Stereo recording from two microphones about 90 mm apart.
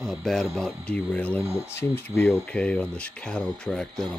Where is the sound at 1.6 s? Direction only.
25° left (ahead or behind).